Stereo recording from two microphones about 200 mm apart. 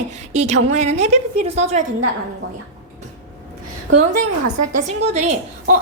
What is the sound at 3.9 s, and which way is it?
Speech, 65° right (ahead or behind).